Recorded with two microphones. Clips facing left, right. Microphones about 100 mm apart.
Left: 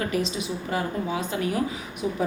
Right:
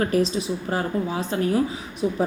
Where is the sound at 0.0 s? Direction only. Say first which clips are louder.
Right 5 dB; 40° right (ahead or behind).